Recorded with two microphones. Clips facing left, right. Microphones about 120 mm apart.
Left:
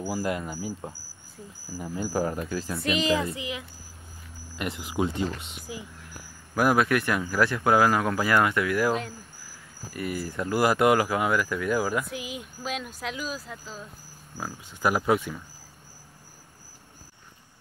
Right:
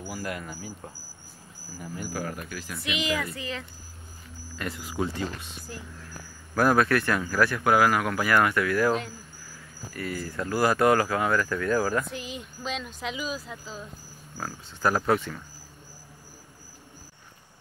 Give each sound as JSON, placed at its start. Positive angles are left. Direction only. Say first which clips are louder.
{"t": 0.1, "sound": "speech", "louder": "left 5 dB", "side_deg": 25}
{"t": 1.8, "sound": "speech", "louder": "left 6 dB", "side_deg": 25}
{"t": 2.8, "sound": "speech", "louder": "left 4 dB", "side_deg": 40}
{"t": 5.7, "sound": "speech", "louder": "left 3 dB", "side_deg": 10}
{"t": 9.9, "sound": "speech", "louder": "left 2 dB", "side_deg": 20}
{"t": 14.4, "sound": "speech", "louder": "even", "side_deg": 10}